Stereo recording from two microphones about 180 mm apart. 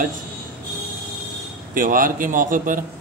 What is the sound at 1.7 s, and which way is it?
Speech, 50° right (ahead or behind).